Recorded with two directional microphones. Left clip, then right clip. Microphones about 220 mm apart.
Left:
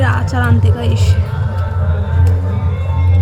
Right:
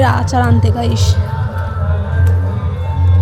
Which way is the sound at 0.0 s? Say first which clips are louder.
Right 4 dB; 15° right (ahead or behind).